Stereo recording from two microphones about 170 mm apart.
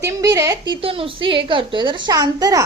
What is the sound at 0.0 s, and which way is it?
A woman's voice, 20° right (ahead or behind).